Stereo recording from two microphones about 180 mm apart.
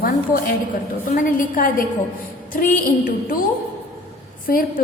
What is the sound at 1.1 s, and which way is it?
A woman's voice, 50° left (ahead or behind).